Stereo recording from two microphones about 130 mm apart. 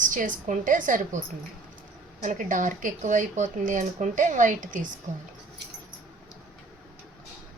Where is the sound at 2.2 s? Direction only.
80° right.